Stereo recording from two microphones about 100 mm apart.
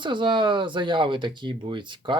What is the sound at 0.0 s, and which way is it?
Speech, 55° right (ahead or behind).